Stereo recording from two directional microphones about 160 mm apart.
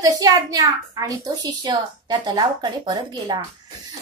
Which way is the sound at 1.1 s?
25° right (ahead or behind).